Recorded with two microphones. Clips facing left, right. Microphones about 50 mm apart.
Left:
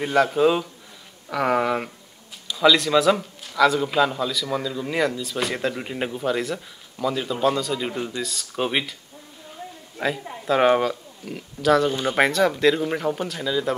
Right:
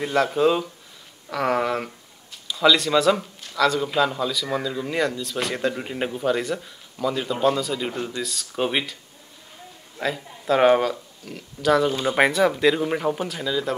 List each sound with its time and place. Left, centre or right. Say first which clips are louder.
0.0 s speech: left 1 dB; centre
9.9 s speech: left 1 dB; centre
12.2 s speech: even; centre